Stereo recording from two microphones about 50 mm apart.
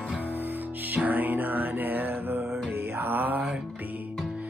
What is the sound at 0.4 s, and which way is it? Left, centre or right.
Music, right.